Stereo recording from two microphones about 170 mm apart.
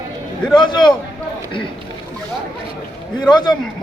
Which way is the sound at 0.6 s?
25° left (ahead or behind).